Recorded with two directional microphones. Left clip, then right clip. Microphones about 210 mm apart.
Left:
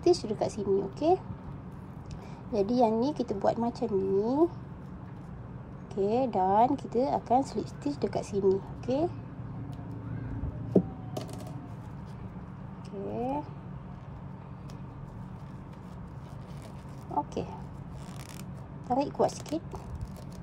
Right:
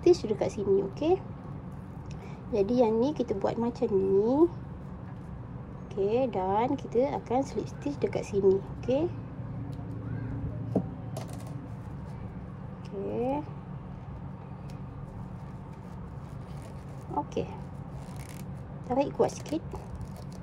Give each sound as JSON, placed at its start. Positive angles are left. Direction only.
{"t": 0.0, "sound": "speech", "side_deg": 10}
{"t": 2.5, "sound": "speech", "side_deg": 15}
{"t": 5.9, "sound": "speech", "side_deg": 20}
{"t": 13.1, "sound": "speech", "side_deg": 10}
{"t": 17.1, "sound": "a sound", "side_deg": 15}
{"t": 18.9, "sound": "speech", "side_deg": 15}